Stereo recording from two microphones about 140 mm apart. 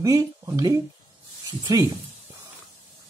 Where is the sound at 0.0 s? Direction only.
25° right (ahead or behind).